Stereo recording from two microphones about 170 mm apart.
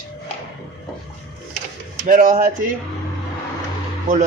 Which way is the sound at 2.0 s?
50° right (ahead or behind).